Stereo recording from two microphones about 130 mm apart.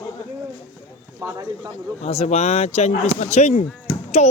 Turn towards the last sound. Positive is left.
turn(degrees=60)  # may be behind; listen again after turning